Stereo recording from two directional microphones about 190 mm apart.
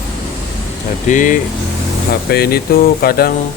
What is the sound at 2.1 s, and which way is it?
Speech, 55° left (ahead or behind).